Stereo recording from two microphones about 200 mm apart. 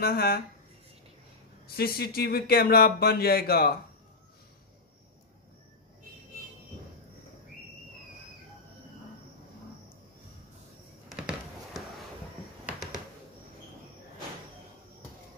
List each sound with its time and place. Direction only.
0.0 s speech: 50° left (ahead or behind)
1.8 s speech: 50° left (ahead or behind)
11.1 s a sound: centre (ahead or behind)
12.6 s finger snapping: centre (ahead or behind)